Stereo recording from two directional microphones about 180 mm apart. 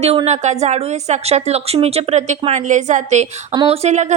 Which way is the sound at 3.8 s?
40° right (ahead or behind).